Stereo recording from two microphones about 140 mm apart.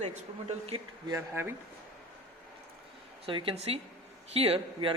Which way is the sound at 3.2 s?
40° right (ahead or behind).